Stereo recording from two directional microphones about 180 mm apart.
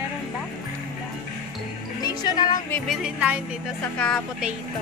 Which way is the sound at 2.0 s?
25° left (ahead or behind).